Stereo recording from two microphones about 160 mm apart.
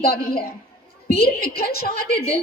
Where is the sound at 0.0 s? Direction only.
75° left (ahead or behind).